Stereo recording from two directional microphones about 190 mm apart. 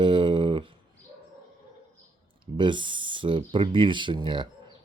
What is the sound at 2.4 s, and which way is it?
Speech, 25° right (ahead or behind).